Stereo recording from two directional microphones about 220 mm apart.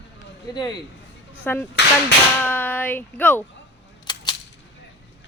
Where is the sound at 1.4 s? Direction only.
10° left (ahead or behind).